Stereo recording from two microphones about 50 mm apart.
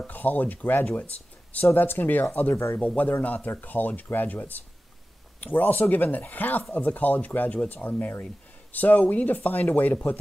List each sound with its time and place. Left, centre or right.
0.0 s speech: left
2.5 s speech: left
3.0 s speech: left